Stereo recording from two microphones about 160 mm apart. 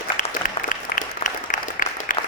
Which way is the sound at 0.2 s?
55° left (ahead or behind).